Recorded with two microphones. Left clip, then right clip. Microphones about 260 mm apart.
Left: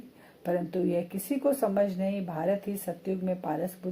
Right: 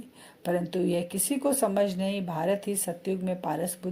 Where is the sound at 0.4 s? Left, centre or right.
Right.